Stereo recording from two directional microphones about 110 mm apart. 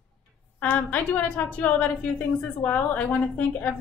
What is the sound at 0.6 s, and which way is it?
A woman's voice, 15° left (ahead or behind).